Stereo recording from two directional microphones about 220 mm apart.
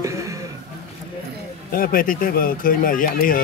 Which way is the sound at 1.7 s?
40° left (ahead or behind).